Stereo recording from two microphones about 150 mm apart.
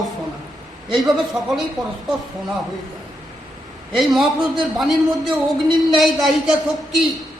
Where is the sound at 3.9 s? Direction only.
Centre (ahead or behind).